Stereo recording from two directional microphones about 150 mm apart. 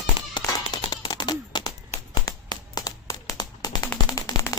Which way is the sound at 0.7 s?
30° left (ahead or behind).